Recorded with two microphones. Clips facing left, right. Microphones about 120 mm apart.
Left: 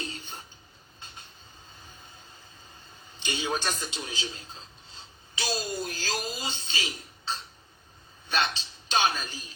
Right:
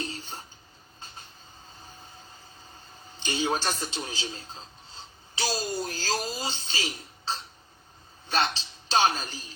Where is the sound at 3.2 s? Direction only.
35° right (ahead or behind).